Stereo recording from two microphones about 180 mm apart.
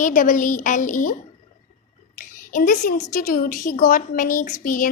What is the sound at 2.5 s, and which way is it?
A child's voice, 50° left (ahead or behind).